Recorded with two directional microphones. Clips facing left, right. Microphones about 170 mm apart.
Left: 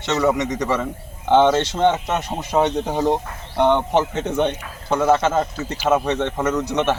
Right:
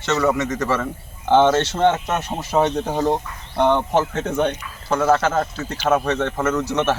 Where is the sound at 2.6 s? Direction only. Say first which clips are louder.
Even; 5° right (ahead or behind).